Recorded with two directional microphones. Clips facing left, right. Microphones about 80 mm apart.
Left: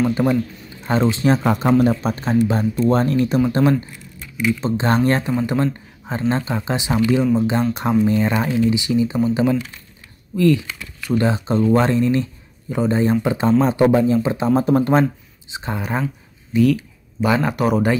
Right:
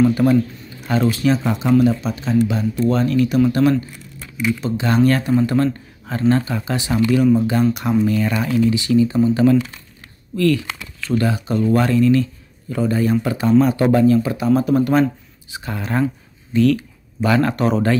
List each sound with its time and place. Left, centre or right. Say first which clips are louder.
0.1 s a man's voice: right 3 dB; left
1.3 s speech: left 2 dB; left
3.6 s speech: right 1 dB; left
16.5 s a sound: even; centre
17.3 s speech: right 1 dB; centre